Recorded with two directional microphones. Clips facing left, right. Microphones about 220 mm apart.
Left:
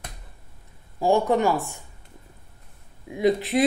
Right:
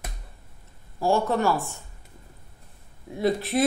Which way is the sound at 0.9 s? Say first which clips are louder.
Left 3 dB; 15° left (ahead or behind).